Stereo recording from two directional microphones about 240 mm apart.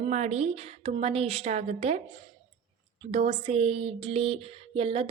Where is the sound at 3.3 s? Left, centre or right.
Right.